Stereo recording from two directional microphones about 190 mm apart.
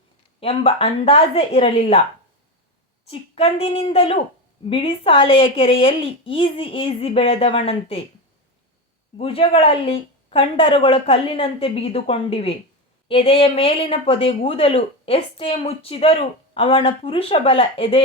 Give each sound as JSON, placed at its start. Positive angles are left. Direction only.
{"t": 0.3, "sound": "speech", "side_deg": 30}
{"t": 3.1, "sound": "speech", "side_deg": 30}
{"t": 9.1, "sound": "speech", "side_deg": 30}